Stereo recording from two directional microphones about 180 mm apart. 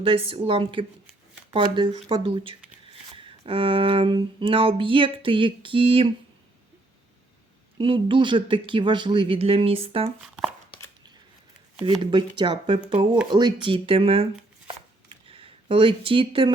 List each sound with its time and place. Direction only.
0.0 s speech: 30° right (ahead or behind)
7.8 s speech: 30° right (ahead or behind)
11.9 s speech: 25° right (ahead or behind)
15.3 s speech: 30° right (ahead or behind)